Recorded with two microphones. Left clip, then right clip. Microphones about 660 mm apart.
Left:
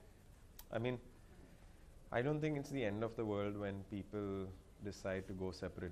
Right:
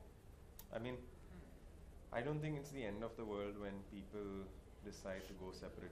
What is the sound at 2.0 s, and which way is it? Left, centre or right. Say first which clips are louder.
Speech: left 5 dB; left.